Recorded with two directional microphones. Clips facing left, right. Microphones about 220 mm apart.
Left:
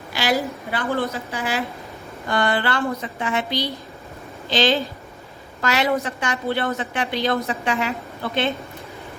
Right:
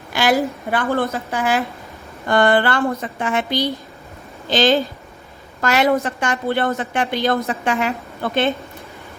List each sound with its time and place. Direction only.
0.1 s a woman's voice: 50° right (ahead or behind)